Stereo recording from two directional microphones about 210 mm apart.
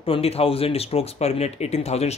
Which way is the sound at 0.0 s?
25° left (ahead or behind).